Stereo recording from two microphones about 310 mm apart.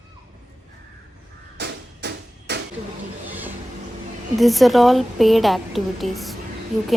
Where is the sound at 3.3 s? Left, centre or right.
Centre.